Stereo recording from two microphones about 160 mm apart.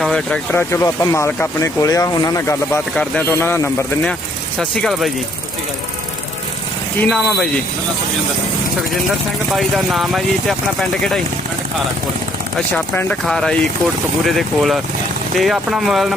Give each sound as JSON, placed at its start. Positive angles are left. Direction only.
{"t": 0.0, "sound": "speech", "side_deg": 5}
{"t": 0.7, "sound": "speech", "side_deg": 15}
{"t": 2.9, "sound": "speech", "side_deg": 5}
{"t": 4.8, "sound": "speech", "side_deg": 0}
{"t": 7.1, "sound": "speech", "side_deg": 0}
{"t": 9.5, "sound": "speech", "side_deg": 0}
{"t": 12.5, "sound": "speech", "side_deg": 5}